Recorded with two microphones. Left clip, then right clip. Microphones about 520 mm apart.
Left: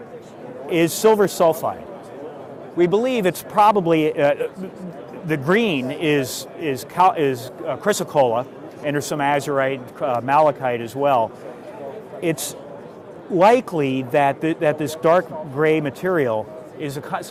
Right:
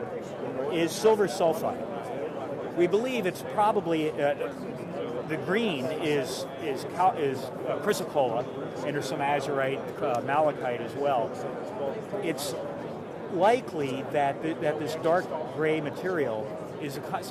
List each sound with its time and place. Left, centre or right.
0.7 s speech: left
2.7 s speech: left
12.2 s speech: left